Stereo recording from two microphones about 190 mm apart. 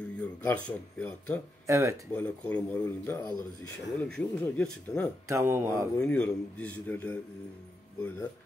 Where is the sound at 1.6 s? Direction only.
15° right (ahead or behind).